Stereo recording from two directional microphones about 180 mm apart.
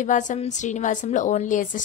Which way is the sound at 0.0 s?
45° left (ahead or behind).